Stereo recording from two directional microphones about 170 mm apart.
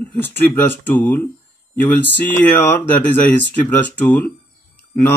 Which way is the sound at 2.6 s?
10° left (ahead or behind).